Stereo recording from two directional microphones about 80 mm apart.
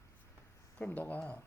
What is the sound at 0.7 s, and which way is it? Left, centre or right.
Speech, centre.